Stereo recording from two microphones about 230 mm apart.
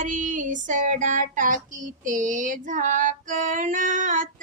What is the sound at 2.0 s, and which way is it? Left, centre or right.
Speech, right.